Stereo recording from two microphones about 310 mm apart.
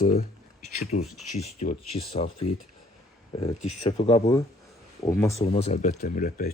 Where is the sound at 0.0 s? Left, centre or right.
Left.